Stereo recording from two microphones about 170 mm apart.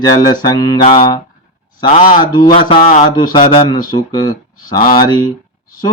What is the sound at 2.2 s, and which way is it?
Speech, 25° left (ahead or behind).